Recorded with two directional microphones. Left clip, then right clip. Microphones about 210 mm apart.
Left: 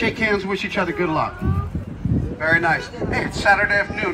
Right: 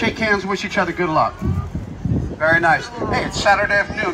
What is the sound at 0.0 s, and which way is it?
Speech, centre (ahead or behind).